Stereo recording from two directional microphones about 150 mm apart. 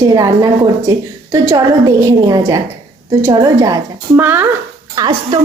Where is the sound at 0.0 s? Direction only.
25° right (ahead or behind).